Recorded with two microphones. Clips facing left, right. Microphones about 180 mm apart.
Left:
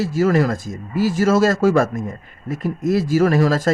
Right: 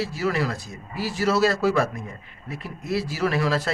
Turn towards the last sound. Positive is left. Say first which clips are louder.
# left 7 dB
turn(degrees=45)  # may be behind; listen again after turning